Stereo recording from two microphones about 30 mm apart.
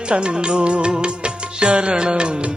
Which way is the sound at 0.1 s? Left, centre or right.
Right.